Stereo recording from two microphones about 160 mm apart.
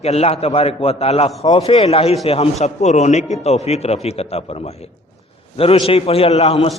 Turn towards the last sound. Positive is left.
turn(degrees=40)  # may be behind; listen again after turning